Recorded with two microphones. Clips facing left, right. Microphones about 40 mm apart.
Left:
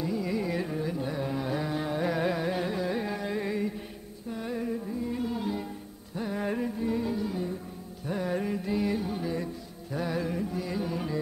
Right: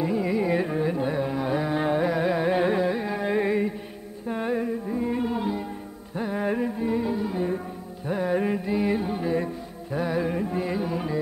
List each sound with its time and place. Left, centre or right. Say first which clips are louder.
0.0 s carnatic music: right 6 dB; right
2.0 s carnatic music: right 4 dB; centre
2.3 s carnatic music: right 7 dB; right
2.9 s carnatic music: right 4 dB; centre
3.3 s music: right 11 dB; right
4.3 s a sound: right 6 dB; right
6.1 s music: right 5 dB; centre
10.8 s music: right 4 dB; centre